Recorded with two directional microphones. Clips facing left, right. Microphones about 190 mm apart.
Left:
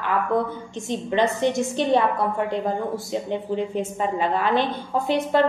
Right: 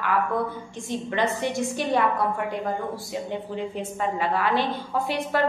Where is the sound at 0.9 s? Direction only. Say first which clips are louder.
Left 4 dB; 20° left (ahead or behind).